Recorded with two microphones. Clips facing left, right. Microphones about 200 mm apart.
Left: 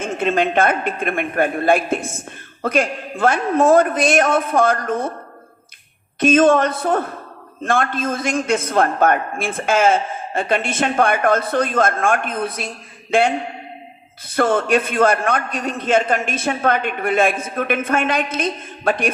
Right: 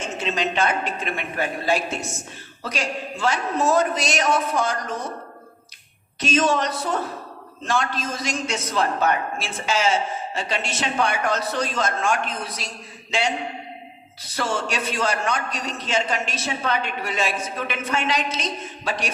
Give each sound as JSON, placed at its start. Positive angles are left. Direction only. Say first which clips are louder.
{"t": 0.0, "sound": "a woman's voice", "louder": "left 7 dB", "side_deg": 55}
{"t": 6.1, "sound": "a man's voice", "louder": "left 8 dB", "side_deg": 55}